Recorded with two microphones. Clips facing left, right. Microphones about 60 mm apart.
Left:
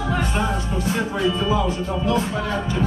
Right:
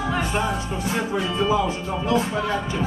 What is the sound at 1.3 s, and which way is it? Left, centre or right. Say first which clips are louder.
Speech: even; centre.